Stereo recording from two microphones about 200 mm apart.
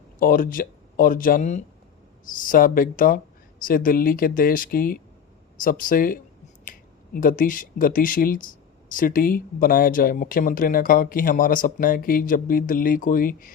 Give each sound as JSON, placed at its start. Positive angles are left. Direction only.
{"t": 0.2, "sound": "speech", "side_deg": 45}